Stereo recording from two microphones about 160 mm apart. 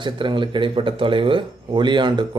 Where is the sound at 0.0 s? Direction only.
30° right (ahead or behind).